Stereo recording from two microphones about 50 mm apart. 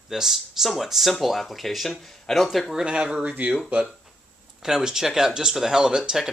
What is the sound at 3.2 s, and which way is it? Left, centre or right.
Speech, right.